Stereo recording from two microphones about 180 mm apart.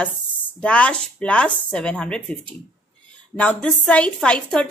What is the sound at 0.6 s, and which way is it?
A woman's voice, 5° left (ahead or behind).